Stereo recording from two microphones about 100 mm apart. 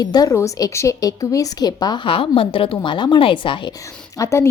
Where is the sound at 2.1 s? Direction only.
65° left (ahead or behind).